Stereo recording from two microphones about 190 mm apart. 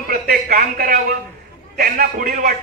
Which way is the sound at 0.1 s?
50° right (ahead or behind).